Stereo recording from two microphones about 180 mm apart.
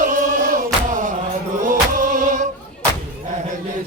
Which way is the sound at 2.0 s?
45° right (ahead or behind).